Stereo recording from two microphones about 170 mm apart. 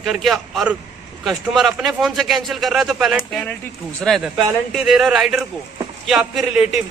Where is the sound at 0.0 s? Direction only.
Centre (ahead or behind).